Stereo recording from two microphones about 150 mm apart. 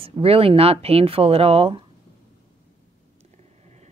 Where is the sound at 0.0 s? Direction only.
40° right (ahead or behind).